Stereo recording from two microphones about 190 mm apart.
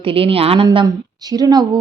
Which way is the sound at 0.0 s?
30° right (ahead or behind).